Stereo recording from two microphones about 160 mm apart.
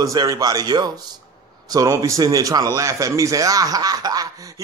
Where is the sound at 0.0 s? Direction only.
20° right (ahead or behind).